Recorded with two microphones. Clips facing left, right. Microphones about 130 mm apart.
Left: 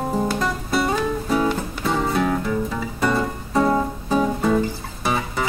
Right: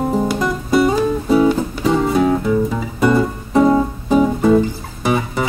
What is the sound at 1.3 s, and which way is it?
Music, 10° right (ahead or behind).